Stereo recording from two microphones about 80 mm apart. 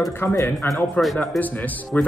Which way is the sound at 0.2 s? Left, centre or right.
Left.